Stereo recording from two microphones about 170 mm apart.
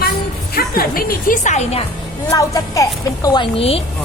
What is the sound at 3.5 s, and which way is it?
Speech, 35° left (ahead or behind).